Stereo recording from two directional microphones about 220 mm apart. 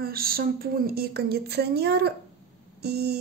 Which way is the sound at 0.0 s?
40° right (ahead or behind).